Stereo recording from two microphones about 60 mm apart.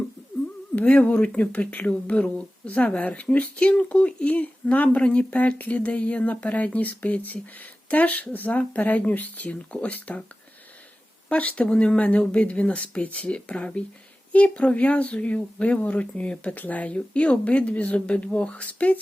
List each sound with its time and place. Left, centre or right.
0.8 s speech: left
11.3 s speech: left